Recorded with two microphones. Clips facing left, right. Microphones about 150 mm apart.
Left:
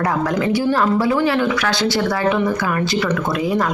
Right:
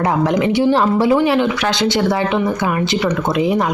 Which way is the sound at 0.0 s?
20° right (ahead or behind).